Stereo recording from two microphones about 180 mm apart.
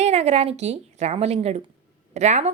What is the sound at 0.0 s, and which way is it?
A woman's voice, 35° right (ahead or behind).